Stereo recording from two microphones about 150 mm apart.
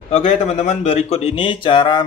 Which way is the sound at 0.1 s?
45° left (ahead or behind).